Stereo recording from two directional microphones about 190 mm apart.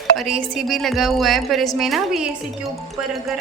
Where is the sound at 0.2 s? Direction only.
5° right (ahead or behind).